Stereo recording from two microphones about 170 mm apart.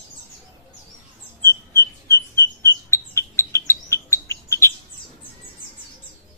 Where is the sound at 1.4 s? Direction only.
15° left (ahead or behind).